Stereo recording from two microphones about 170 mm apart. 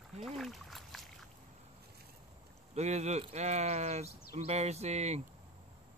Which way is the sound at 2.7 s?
40° right (ahead or behind).